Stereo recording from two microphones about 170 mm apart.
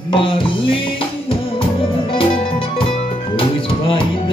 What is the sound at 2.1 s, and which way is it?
Music, 35° left (ahead or behind).